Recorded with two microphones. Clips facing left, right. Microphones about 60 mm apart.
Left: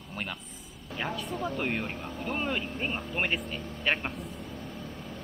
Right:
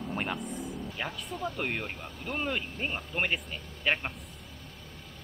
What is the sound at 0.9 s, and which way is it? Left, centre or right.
Speech, centre.